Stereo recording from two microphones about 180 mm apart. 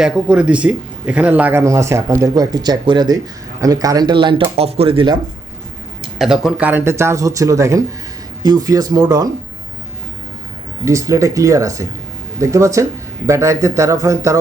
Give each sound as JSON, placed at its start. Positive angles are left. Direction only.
{"t": 0.0, "sound": "speech", "side_deg": -5}
{"t": 6.0, "sound": "speech", "side_deg": 0}
{"t": 10.8, "sound": "speech", "side_deg": -15}